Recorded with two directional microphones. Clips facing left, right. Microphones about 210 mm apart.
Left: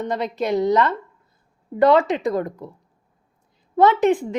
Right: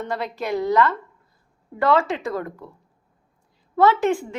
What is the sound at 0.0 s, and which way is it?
A woman's voice, 20° left (ahead or behind).